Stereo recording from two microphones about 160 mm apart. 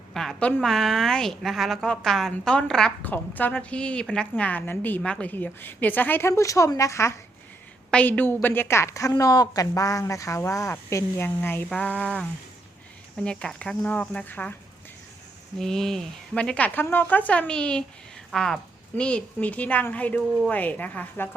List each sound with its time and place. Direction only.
0.1 s a woman's voice: centre (ahead or behind)
15.5 s a woman's voice: 5° left (ahead or behind)